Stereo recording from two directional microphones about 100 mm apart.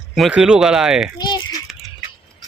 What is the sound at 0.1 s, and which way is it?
Speech, 5° right (ahead or behind).